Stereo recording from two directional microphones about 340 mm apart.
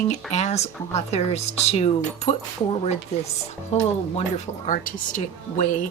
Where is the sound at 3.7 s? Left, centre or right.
Centre.